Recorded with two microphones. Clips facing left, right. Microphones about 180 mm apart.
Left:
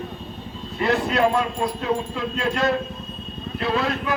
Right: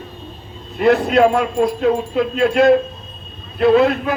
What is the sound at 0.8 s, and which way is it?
Speech, 55° right (ahead or behind).